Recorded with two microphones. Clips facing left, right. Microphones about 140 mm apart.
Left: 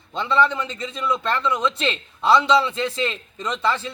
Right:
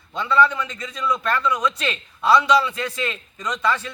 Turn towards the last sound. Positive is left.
turn(degrees=30)  # may be behind; listen again after turning